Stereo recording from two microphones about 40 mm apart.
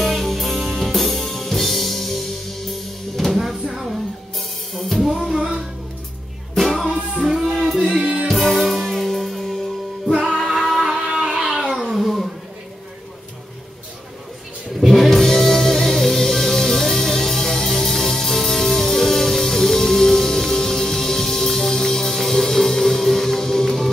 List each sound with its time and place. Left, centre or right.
0.0 s music: centre
7.2 s music: centre
8.0 s music: right
8.4 s music: centre
10.8 s a sound: centre
11.6 s cat: centre
14.8 s music: centre